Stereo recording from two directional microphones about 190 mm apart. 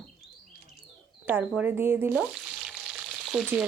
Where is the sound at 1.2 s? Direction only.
10° right (ahead or behind).